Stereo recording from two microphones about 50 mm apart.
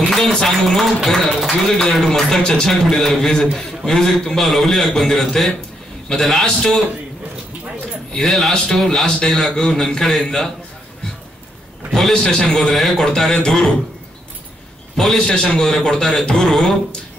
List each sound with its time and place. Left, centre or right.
0.0 s a man's voice: centre
8.2 s a man's voice: centre
11.9 s speech: centre
15.1 s speech: centre